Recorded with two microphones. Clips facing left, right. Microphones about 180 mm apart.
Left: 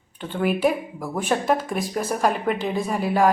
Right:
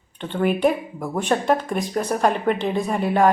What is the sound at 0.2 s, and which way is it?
Speech, 5° left (ahead or behind).